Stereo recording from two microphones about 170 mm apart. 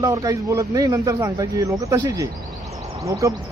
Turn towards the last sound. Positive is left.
turn(degrees=-20)  # may be behind; listen again after turning